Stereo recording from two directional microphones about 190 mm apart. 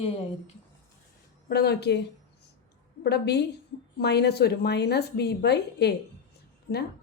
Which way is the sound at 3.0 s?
60° left (ahead or behind).